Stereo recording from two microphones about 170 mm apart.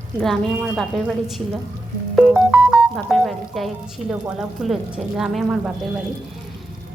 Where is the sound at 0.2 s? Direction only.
Centre (ahead or behind).